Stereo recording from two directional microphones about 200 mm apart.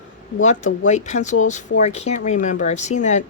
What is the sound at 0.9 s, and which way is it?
Speech, 35° left (ahead or behind).